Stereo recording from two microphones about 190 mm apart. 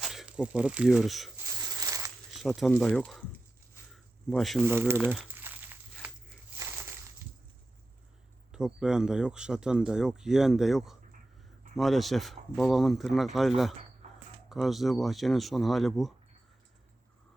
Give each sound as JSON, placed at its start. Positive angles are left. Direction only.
{"t": 0.0, "sound": "speech", "side_deg": 0}
{"t": 1.4, "sound": "a sound", "side_deg": -15}
{"t": 2.3, "sound": "speech", "side_deg": 0}
{"t": 3.9, "sound": "a sound", "side_deg": 0}
{"t": 4.6, "sound": "speech", "side_deg": -10}
{"t": 5.1, "sound": "crumpling", "side_deg": -10}
{"t": 6.6, "sound": "crushing", "side_deg": -10}
{"t": 8.5, "sound": "speech", "side_deg": -5}
{"t": 14.5, "sound": "speech", "side_deg": 0}